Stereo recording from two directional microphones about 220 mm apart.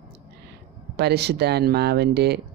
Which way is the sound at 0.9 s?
50° right (ahead or behind).